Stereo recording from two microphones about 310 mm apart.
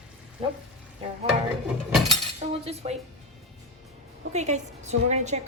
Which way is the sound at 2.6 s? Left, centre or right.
Centre.